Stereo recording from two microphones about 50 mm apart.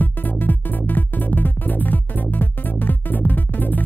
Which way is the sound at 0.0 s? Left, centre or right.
Left.